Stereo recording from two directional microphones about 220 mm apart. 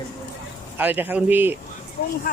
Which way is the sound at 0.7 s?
10° right (ahead or behind).